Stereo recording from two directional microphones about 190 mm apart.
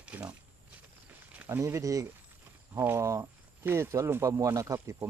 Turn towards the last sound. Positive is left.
turn(degrees=-15)  # may be behind; listen again after turning